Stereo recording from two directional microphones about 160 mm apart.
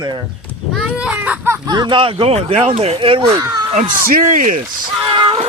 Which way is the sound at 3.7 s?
60° right (ahead or behind).